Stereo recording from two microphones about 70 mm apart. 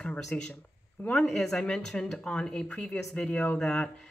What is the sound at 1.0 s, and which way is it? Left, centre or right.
Speech, left.